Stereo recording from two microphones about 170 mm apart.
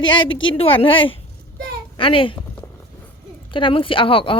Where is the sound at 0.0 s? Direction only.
90° left.